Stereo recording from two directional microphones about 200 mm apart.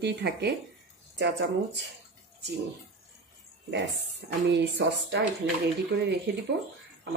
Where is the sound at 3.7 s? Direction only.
60° right (ahead or behind).